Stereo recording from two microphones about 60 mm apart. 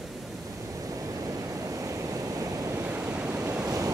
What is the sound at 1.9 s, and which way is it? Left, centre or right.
Waves, right.